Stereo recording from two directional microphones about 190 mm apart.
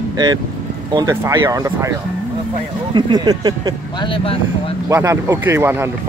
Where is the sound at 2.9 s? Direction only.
20° right (ahead or behind).